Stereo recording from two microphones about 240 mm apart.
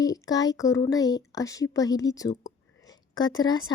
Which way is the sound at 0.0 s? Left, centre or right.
Centre.